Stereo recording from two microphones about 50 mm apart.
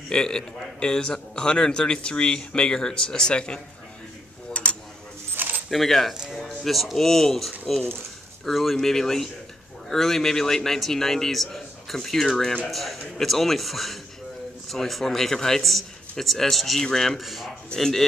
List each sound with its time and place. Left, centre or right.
0.1 s a man's voice: centre
4.6 s a sound: left
5.3 s keys jangling: right
5.7 s a man's voice: centre